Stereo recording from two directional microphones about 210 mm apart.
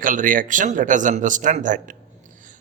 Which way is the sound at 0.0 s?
40° right (ahead or behind).